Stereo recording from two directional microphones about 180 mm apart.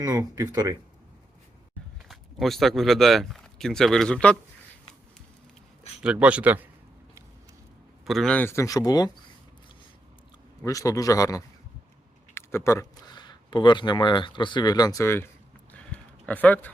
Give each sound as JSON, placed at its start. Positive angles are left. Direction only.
{"t": 0.0, "sound": "speech", "side_deg": -20}
{"t": 2.0, "sound": "speech", "side_deg": 0}
{"t": 6.0, "sound": "a man's voice", "side_deg": -5}
{"t": 8.0, "sound": "speech", "side_deg": 0}
{"t": 10.6, "sound": "a man's voice", "side_deg": 20}
{"t": 15.7, "sound": "a sound", "side_deg": 10}